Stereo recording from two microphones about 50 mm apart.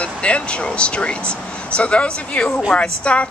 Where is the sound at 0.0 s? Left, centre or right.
Left.